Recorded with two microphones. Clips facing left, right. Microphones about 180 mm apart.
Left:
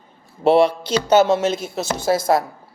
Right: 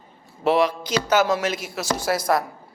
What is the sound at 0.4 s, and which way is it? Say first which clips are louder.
A woman's voice: left 5 dB; 30° left (ahead or behind).